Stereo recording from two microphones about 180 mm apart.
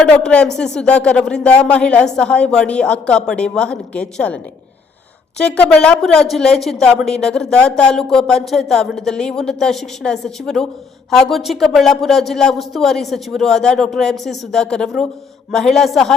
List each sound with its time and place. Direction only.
0.0 s a woman's voice: 5° left (ahead or behind)
5.4 s a woman's voice: 5° left (ahead or behind)